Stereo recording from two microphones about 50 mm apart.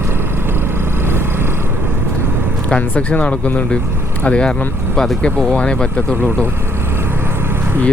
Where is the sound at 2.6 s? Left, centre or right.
Left.